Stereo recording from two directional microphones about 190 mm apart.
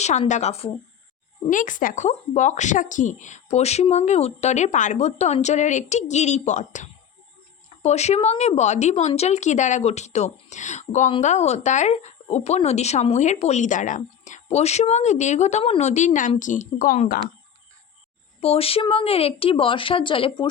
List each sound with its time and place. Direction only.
0.0 s speech: 35° left (ahead or behind)
18.3 s speech: 30° left (ahead or behind)